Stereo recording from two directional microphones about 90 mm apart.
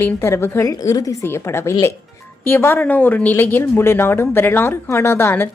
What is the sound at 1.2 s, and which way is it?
Speech, 30° left (ahead or behind).